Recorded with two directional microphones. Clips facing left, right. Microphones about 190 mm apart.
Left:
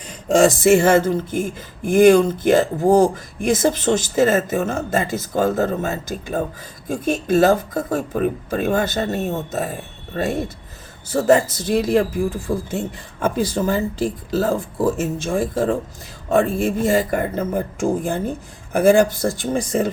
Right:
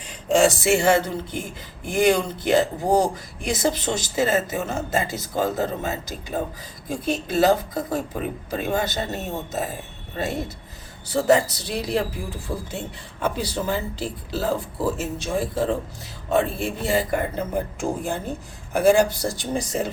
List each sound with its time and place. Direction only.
0.3 s speech: 45° left (ahead or behind)
11.1 s speech: 45° left (ahead or behind)